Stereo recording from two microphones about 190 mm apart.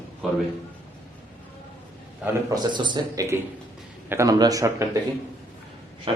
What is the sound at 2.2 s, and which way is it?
A man's voice, 20° right (ahead or behind).